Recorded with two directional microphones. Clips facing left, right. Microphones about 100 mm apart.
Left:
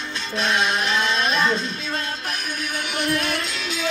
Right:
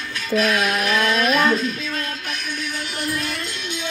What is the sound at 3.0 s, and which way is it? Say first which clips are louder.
Music: left 3 dB; 70° left (ahead or behind).